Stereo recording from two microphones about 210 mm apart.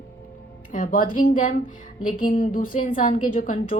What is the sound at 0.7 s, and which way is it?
A woman's voice, 40° left (ahead or behind).